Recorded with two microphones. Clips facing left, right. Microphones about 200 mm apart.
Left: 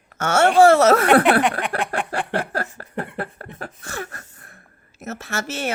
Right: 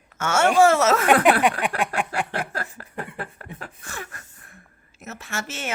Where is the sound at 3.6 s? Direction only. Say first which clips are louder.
Left 7 dB; 40° left (ahead or behind).